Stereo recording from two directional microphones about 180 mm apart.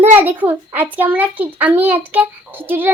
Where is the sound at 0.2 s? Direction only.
10° right (ahead or behind).